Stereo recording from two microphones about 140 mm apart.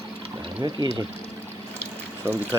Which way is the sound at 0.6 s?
25° right (ahead or behind).